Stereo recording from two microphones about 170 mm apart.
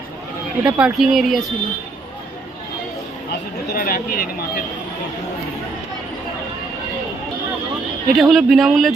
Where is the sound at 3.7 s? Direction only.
60° left (ahead or behind).